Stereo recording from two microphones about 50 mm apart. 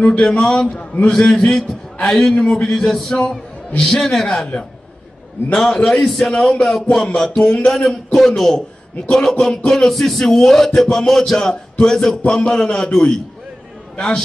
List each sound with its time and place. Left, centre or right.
0.0 s a man's voice: left
1.0 s a man's voice: centre
2.5 s a man's voice: centre
5.8 s a man's voice: centre
7.7 s a man's voice: centre